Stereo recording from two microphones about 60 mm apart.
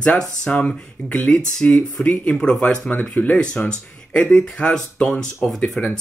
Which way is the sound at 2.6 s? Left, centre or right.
Left.